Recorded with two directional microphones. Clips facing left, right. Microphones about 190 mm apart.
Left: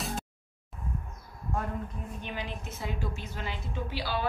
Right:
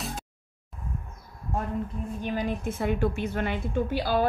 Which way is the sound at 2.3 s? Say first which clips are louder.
Right 12 dB; 50° right (ahead or behind).